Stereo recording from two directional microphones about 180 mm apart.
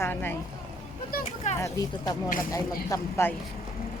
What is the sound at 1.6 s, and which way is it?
Speech, 20° left (ahead or behind).